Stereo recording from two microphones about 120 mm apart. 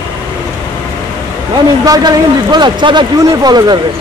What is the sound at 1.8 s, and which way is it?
A man's voice, 35° right (ahead or behind).